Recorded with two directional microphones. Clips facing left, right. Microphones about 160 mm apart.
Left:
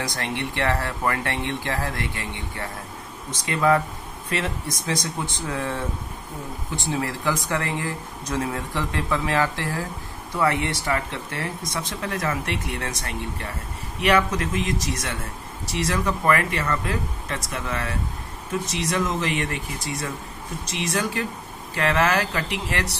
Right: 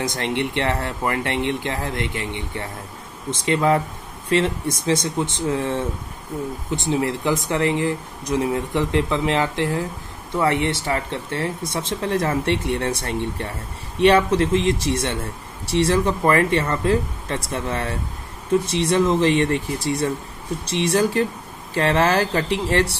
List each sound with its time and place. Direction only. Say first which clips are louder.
0.0 s speech: right 5 dB; 20° right (ahead or behind)